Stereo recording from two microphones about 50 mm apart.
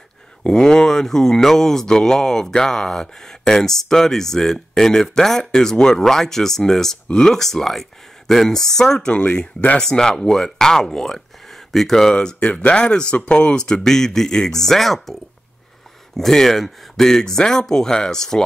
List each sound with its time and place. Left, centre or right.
0.4 s speech: centre
9.1 s speech: left
9.8 s speech: centre
16.2 s speech: centre